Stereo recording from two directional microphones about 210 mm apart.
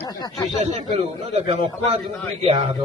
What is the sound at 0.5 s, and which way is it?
A man's voice, 30° right (ahead or behind).